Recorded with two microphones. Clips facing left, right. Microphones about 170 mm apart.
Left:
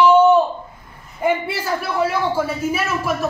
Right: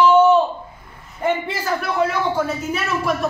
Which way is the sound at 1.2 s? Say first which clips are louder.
Left 2 dB; 10° left (ahead or behind).